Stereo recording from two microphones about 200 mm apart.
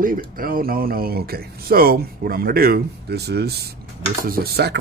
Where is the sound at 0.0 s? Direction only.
45° right (ahead or behind).